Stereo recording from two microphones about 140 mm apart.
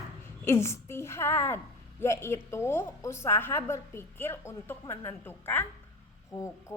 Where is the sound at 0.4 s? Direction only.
20° left (ahead or behind).